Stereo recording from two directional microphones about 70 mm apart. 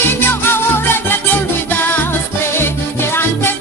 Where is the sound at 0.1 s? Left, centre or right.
Left.